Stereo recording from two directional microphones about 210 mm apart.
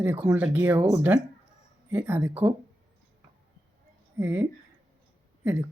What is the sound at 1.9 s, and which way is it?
Speech, 10° right (ahead or behind).